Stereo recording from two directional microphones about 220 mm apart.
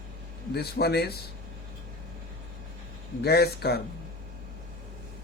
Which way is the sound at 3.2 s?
45° left (ahead or behind).